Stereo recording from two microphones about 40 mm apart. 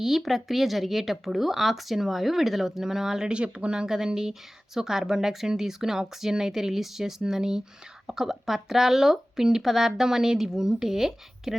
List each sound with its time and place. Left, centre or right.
0.0 s speech: centre
3.3 s speech: right; by 11.5 s centre